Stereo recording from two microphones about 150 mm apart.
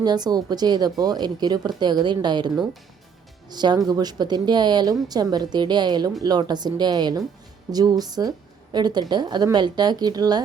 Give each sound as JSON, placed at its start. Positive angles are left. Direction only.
{"t": 0.0, "sound": "a woman's voice", "side_deg": -25}
{"t": 3.5, "sound": "a woman's voice", "side_deg": -30}